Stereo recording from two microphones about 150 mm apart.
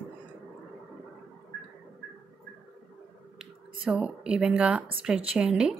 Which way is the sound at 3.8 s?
5° right (ahead or behind).